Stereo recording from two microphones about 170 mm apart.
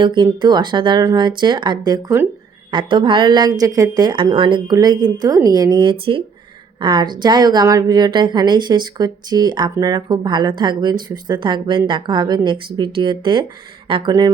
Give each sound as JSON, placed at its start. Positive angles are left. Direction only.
{"t": 0.0, "sound": "a woman's voice", "side_deg": -30}